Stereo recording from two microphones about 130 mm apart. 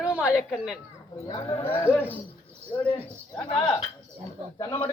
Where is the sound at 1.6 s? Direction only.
15° left (ahead or behind).